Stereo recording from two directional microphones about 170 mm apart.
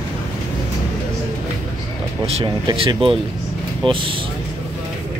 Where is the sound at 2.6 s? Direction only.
30° right (ahead or behind).